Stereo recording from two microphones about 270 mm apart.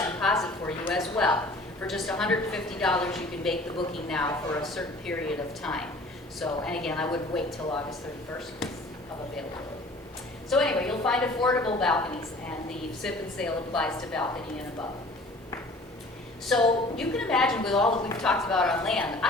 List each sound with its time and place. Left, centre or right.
0.0 s a sound: centre
1.8 s a woman's voice: centre
10.5 s a woman's voice: centre
16.5 s a woman's voice: centre